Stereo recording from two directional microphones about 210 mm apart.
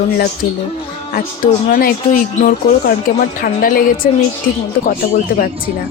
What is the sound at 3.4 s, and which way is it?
Speech, 45° left (ahead or behind).